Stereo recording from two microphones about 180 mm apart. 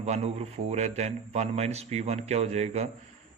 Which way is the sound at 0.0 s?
35° right (ahead or behind).